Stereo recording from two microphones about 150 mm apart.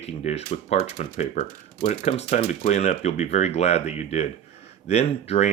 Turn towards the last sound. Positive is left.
turn(degrees=45)  # may be behind; listen again after turning